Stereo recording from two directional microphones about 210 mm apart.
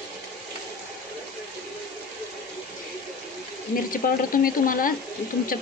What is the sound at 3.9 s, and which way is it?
Speech, 40° left (ahead or behind).